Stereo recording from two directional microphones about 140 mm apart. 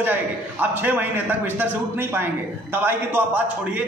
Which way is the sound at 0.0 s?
15° right (ahead or behind).